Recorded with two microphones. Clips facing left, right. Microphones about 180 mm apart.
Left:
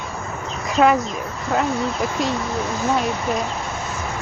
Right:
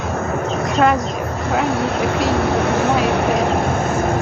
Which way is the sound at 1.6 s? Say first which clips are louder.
Right 4 dB; 65° right (ahead or behind).